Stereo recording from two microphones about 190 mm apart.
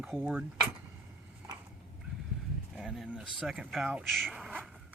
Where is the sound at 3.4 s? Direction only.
5° right (ahead or behind).